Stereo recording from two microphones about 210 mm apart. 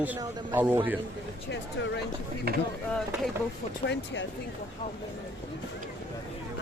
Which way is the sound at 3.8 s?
55° left (ahead or behind).